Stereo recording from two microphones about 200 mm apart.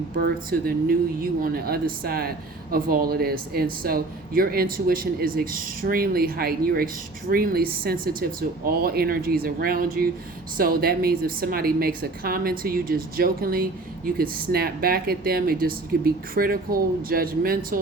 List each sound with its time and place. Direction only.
0.5 s speech: 45° right (ahead or behind)